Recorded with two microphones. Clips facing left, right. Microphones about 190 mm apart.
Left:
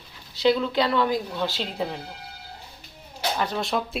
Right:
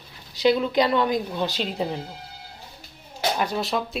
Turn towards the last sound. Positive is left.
turn(degrees=0)  # may be behind; listen again after turning